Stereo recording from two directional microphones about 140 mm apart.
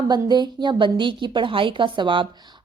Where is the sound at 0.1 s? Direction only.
30° right (ahead or behind).